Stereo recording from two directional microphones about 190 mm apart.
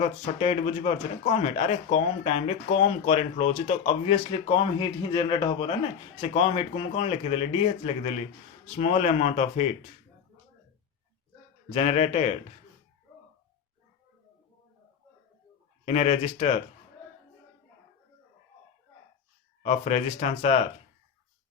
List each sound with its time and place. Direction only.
0.0 s speech: 35° left (ahead or behind)
11.7 s speech: 35° left (ahead or behind)
15.9 s speech: 35° left (ahead or behind)
19.6 s speech: 35° left (ahead or behind)